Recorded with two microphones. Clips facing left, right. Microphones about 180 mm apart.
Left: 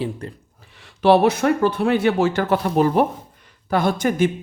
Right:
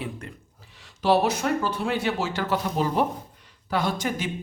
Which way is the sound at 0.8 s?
60° left (ahead or behind).